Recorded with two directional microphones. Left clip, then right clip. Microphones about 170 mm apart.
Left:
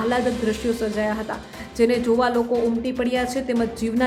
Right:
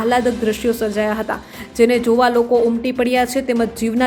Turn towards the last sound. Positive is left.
turn(degrees=-20)  # may be behind; listen again after turning